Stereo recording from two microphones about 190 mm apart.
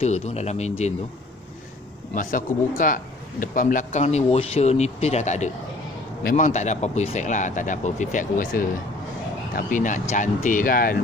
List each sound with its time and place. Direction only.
0.0 s a man's voice: 35° left (ahead or behind)
2.8 s a man's voice: 45° left (ahead or behind)